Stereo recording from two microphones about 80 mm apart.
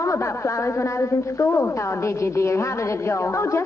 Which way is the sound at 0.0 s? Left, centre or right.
Left.